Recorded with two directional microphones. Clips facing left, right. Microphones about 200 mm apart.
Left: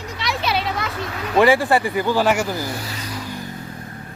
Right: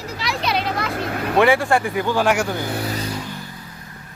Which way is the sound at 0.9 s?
55° right (ahead or behind).